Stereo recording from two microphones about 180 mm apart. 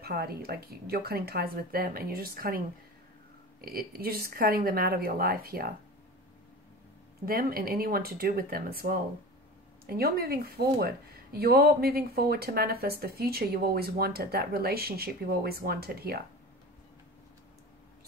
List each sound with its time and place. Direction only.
0.0 s speech: 60° right (ahead or behind)
3.6 s speech: 55° right (ahead or behind)
7.2 s speech: 55° right (ahead or behind)